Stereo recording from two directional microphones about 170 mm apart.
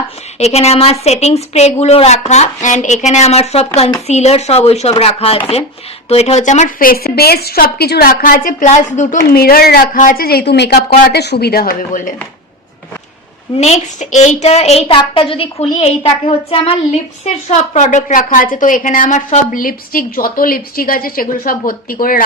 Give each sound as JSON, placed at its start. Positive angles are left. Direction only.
{"t": 0.3, "sound": "a woman's voice", "side_deg": 40}
{"t": 9.3, "sound": "a woman's voice", "side_deg": 65}
{"t": 13.6, "sound": "a woman's voice", "side_deg": 40}